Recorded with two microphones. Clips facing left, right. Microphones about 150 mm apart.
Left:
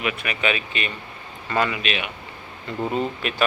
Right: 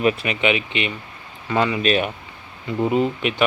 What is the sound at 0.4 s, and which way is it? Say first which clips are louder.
Speech: right 4 dB; 20° right (ahead or behind).